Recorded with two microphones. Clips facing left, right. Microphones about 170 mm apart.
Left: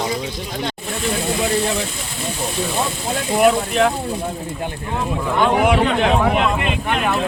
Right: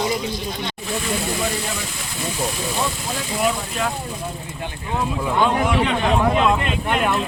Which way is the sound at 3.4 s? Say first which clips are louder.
Left 8 dB; 65° left (ahead or behind).